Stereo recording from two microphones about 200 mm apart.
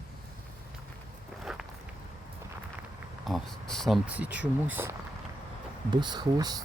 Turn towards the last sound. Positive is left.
turn(degrees=-20)  # may be behind; listen again after turning